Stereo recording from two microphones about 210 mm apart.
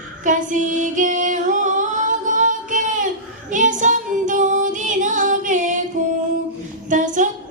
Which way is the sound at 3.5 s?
35° right (ahead or behind).